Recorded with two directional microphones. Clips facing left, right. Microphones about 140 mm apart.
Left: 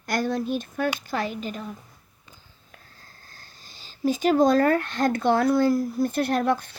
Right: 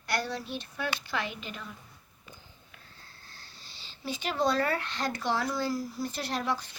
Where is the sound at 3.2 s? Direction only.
45° left (ahead or behind).